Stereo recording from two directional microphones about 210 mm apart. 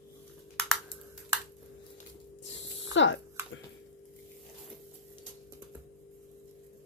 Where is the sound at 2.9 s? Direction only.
60° left (ahead or behind).